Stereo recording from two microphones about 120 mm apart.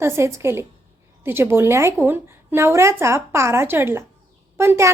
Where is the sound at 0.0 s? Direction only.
25° right (ahead or behind).